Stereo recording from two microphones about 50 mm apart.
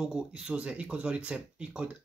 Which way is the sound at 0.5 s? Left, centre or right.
Right.